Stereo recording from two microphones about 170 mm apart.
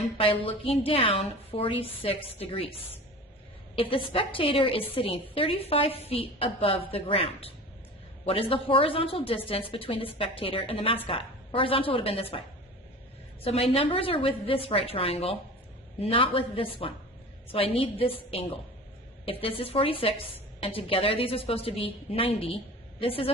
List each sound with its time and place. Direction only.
0.2 s a woman's voice: 30° left (ahead or behind)
13.4 s a woman's voice: 35° left (ahead or behind)